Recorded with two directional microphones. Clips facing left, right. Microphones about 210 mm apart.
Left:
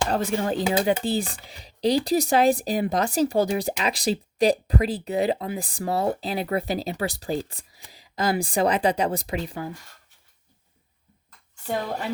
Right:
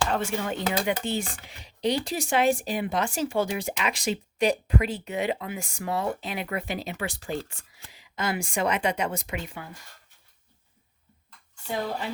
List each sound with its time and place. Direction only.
0.1 s speech: 35° left (ahead or behind)